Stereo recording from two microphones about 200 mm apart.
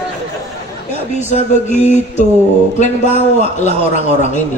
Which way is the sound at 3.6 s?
35° left (ahead or behind).